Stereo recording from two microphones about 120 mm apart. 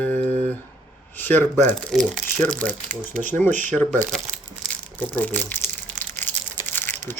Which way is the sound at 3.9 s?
5° left (ahead or behind).